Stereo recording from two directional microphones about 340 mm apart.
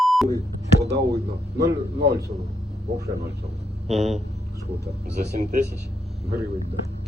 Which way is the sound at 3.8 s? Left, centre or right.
Centre.